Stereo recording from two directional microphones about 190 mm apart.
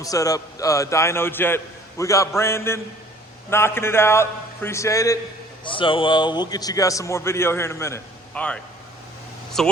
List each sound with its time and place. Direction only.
0.0 s a man's voice: 20° left (ahead or behind)
5.6 s a man's voice: 25° left (ahead or behind); by 9.7 s centre (ahead or behind)